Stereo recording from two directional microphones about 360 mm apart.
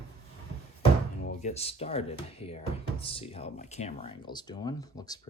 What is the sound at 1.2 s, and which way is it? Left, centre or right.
Speech, centre.